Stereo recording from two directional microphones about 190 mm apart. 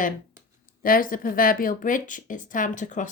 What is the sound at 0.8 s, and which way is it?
Speech, 45° left (ahead or behind).